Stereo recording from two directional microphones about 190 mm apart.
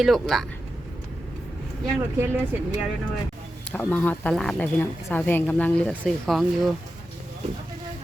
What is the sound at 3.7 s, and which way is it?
Speech, 10° left (ahead or behind).